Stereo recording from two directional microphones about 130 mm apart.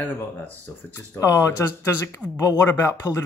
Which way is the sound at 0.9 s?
20° left (ahead or behind).